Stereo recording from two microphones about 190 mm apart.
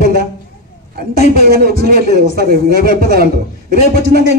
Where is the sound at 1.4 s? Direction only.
50° right (ahead or behind).